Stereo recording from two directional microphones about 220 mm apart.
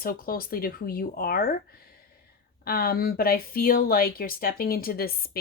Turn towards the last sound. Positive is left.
turn(degrees=45)  # may be behind; listen again after turning